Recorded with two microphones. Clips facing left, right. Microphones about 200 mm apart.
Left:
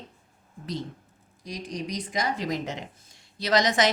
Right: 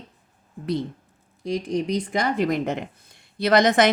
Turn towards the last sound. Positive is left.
turn(degrees=-55)  # may be behind; listen again after turning